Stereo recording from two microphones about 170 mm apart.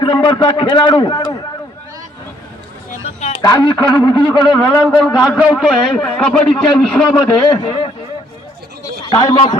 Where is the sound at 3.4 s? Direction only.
25° left (ahead or behind).